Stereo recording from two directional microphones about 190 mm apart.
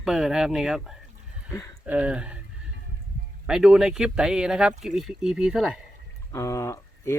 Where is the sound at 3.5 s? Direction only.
5° right (ahead or behind).